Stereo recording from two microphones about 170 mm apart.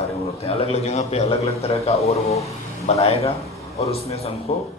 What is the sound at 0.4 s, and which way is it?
Speech, 35° left (ahead or behind).